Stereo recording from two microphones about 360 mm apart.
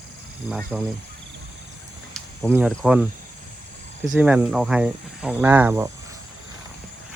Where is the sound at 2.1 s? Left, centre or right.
Centre.